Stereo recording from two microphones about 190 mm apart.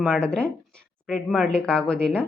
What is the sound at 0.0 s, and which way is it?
A woman's voice, 5° left (ahead or behind).